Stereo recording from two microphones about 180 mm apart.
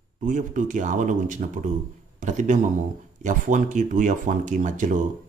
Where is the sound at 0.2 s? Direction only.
45° right (ahead or behind).